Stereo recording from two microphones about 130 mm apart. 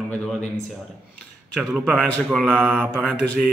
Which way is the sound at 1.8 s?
Centre (ahead or behind).